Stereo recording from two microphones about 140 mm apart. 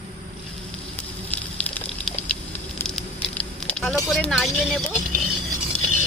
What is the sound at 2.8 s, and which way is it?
Fire, 5° left (ahead or behind).